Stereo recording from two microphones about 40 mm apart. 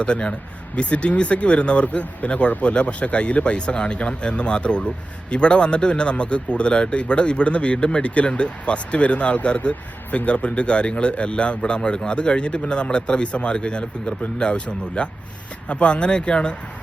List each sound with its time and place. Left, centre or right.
0.0 s speech: left